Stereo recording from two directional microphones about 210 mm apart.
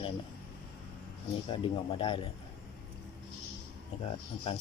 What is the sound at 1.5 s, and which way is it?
Speech, 25° left (ahead or behind).